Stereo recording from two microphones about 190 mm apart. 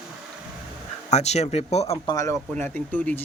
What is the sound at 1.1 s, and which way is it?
Speech, 35° left (ahead or behind).